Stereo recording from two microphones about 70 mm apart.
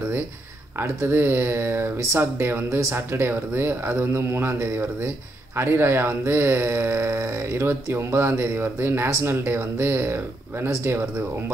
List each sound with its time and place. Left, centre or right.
0.7 s speech: right